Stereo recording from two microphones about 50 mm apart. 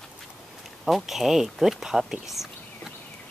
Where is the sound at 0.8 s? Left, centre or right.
Centre.